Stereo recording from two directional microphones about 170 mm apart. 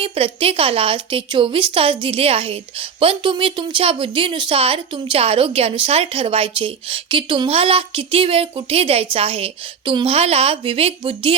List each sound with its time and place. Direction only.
0.0 s a woman's voice: 30° right (ahead or behind)